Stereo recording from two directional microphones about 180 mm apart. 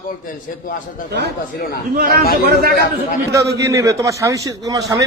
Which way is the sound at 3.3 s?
15° right (ahead or behind).